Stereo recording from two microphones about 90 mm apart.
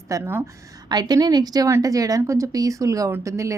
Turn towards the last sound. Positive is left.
turn(degrees=-35)  # may be behind; listen again after turning